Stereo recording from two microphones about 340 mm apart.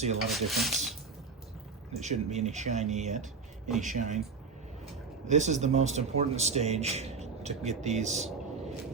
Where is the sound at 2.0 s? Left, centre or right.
Centre.